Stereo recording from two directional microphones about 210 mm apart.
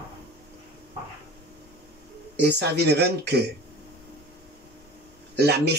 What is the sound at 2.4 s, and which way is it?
Speech, 50° right (ahead or behind).